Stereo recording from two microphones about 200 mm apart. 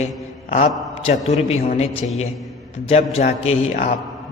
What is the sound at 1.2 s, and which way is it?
A man's voice, 30° left (ahead or behind).